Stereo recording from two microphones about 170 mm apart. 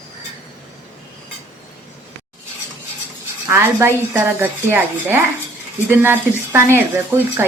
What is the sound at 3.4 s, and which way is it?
Speech, 15° right (ahead or behind).